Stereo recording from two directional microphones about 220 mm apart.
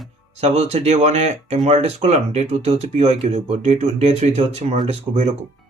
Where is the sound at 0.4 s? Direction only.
30° right (ahead or behind).